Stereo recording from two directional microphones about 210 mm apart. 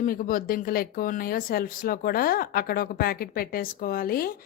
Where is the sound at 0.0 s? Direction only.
40° left (ahead or behind).